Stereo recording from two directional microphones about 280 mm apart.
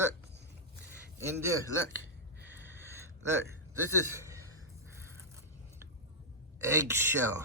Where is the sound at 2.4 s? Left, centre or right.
Centre.